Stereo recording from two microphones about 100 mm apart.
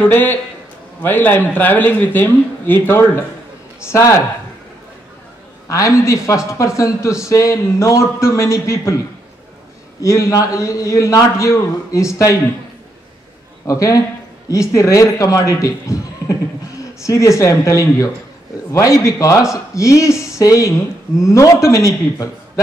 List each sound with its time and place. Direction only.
0.1 s speech: 20° left (ahead or behind)
5.7 s speech: 30° left (ahead or behind)
10.0 s speech: 30° left (ahead or behind)
13.7 s a man's voice: 35° left (ahead or behind)